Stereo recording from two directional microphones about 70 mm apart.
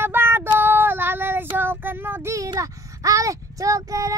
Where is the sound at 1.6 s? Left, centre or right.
Right.